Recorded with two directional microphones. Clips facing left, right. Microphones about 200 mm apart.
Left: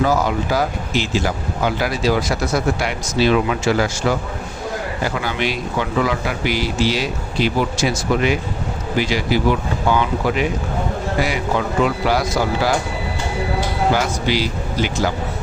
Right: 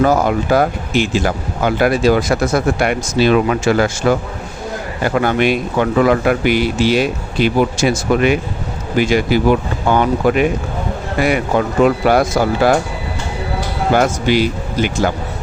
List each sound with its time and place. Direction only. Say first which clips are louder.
0.0 s speech: right 4 dB; 55° right (ahead or behind)
5.0 s speech: right 9 dB; 55° right (ahead or behind)
13.9 s speech: right 10 dB; 55° right (ahead or behind)